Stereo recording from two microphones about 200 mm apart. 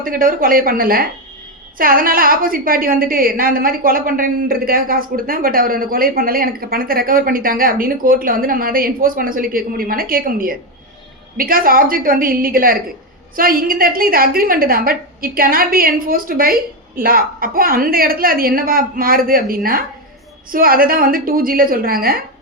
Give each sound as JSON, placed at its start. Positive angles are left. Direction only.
{"t": 0.0, "sound": "a woman's voice", "side_deg": -45}